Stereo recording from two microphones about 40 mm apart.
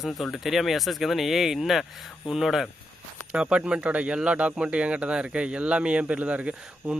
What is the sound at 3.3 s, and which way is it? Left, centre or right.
Speech, right.